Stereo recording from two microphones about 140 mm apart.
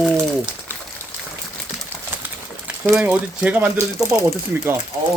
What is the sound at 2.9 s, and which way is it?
Speech, 10° right (ahead or behind).